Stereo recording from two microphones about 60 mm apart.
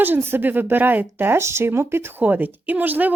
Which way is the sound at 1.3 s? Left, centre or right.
Right.